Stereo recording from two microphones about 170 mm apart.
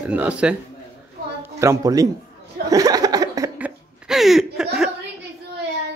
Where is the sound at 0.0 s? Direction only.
10° right (ahead or behind).